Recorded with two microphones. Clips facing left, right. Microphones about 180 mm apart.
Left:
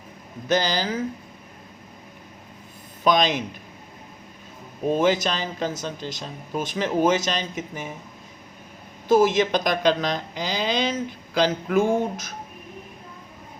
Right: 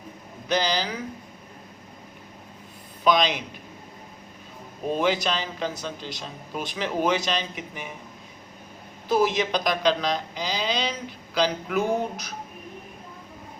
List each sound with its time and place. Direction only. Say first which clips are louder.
0.4 s speech: left 2 dB; 45° left (ahead or behind)
3.0 s speech: left 1 dB; 45° left (ahead or behind)
4.9 s speech: left 2 dB; 45° left (ahead or behind)
9.0 s speech: left 5 dB; 45° left (ahead or behind)